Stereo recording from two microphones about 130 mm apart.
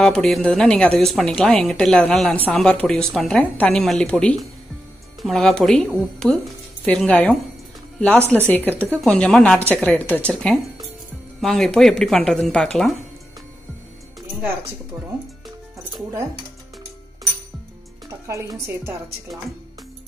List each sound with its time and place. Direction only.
0.0 s a woman's voice: centre (ahead or behind)
8.5 s a woman's voice: 10° left (ahead or behind)
18.2 s speech: 25° right (ahead or behind)